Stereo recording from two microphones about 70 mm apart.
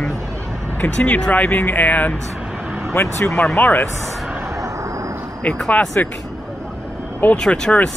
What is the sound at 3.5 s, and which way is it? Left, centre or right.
Speech, left.